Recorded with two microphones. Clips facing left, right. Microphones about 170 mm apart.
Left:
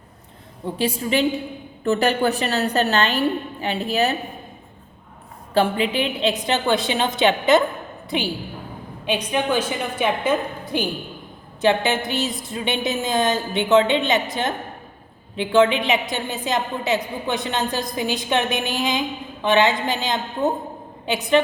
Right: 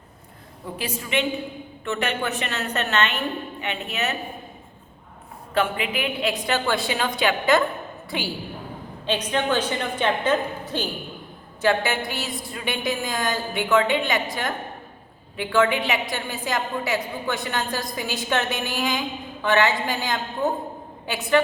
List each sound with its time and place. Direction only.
0.6 s a woman's voice: 30° left (ahead or behind)
5.5 s a woman's voice: 30° left (ahead or behind)